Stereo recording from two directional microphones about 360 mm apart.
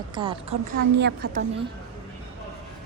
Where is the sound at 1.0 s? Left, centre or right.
Right.